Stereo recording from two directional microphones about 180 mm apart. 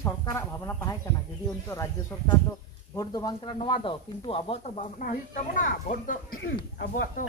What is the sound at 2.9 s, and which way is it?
Speech, 25° left (ahead or behind).